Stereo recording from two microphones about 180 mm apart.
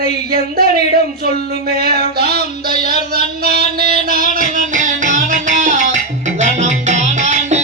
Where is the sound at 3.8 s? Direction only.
55° right (ahead or behind).